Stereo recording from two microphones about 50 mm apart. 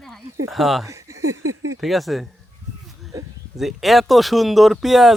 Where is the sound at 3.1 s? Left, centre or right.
Right.